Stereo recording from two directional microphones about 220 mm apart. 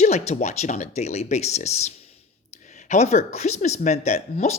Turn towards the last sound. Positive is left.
turn(degrees=30)  # may be behind; listen again after turning